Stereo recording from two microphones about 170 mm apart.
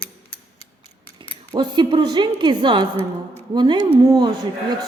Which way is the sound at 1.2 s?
25° right (ahead or behind).